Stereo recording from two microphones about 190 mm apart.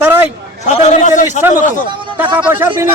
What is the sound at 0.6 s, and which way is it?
Speech, 35° left (ahead or behind).